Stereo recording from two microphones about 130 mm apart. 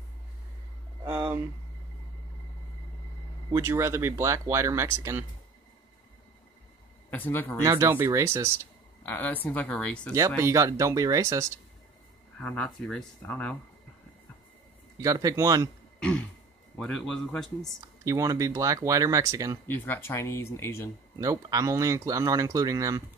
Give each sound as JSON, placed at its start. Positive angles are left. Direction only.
{"t": 1.0, "sound": "speech", "side_deg": -20}
{"t": 3.5, "sound": "speech", "side_deg": -20}
{"t": 7.1, "sound": "speech", "side_deg": 15}
{"t": 7.6, "sound": "speech", "side_deg": -20}
{"t": 9.0, "sound": "speech", "side_deg": 15}
{"t": 10.1, "sound": "speech", "side_deg": -20}
{"t": 12.4, "sound": "speech", "side_deg": 10}
{"t": 15.0, "sound": "speech", "side_deg": -25}
{"t": 16.0, "sound": "throat clearing", "side_deg": 10}
{"t": 16.7, "sound": "speech", "side_deg": 10}
{"t": 17.7, "sound": "speech", "side_deg": -25}
{"t": 19.7, "sound": "speech", "side_deg": 20}
{"t": 21.2, "sound": "speech", "side_deg": -30}